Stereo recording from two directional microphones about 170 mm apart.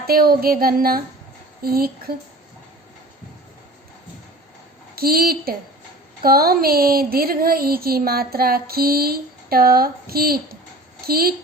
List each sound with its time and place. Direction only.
0.1 s speech: 65° right (ahead or behind)
4.9 s speech: 60° right (ahead or behind)